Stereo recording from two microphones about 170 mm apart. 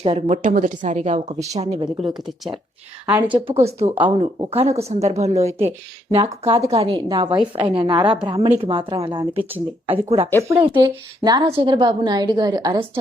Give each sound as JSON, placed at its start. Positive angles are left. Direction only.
{"t": 0.0, "sound": "a woman's voice", "side_deg": -40}
{"t": 1.8, "sound": "a woman's voice", "side_deg": -25}
{"t": 3.1, "sound": "a woman's voice", "side_deg": -10}
{"t": 3.5, "sound": "a woman's voice", "side_deg": -40}